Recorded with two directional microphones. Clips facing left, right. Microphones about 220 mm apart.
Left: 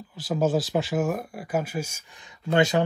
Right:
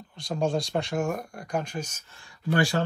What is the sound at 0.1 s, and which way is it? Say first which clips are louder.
Speech: left 3 dB; 5° left (ahead or behind).